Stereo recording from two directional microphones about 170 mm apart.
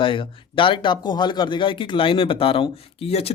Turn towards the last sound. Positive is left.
turn(degrees=35)  # may be behind; listen again after turning